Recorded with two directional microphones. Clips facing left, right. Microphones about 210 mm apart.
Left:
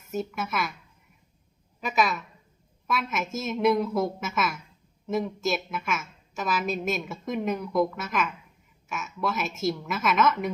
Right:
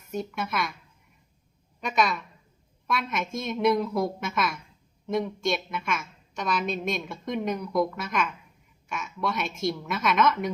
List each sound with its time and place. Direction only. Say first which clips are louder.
0.1 s a woman's voice: left 1 dB; centre (ahead or behind)
1.8 s a woman's voice: even; 5° left (ahead or behind)